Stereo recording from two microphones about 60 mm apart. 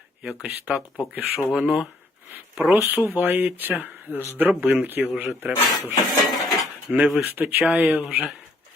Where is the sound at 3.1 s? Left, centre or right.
Right.